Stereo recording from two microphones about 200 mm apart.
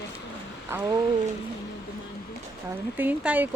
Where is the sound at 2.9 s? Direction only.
10° right (ahead or behind).